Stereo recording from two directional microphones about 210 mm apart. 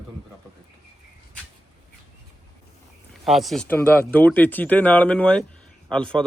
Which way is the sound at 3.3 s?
Centre (ahead or behind).